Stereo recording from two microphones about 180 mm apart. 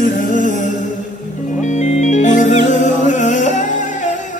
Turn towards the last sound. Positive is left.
turn(degrees=40)  # may be behind; listen again after turning